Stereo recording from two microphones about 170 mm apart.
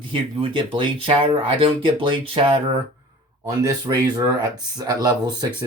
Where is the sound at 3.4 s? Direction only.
20° right (ahead or behind).